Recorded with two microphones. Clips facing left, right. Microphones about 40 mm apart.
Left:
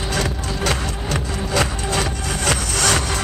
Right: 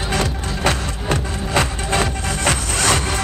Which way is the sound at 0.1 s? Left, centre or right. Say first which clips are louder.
Right 1 dB; right.